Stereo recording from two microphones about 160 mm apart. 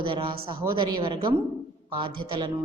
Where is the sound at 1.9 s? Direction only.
30° right (ahead or behind).